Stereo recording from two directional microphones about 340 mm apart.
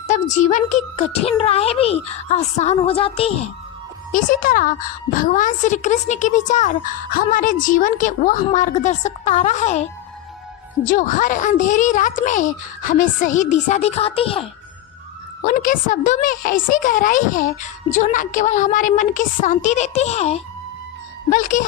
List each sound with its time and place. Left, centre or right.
0.1 s a child's voice: left
10.8 s a child's voice: left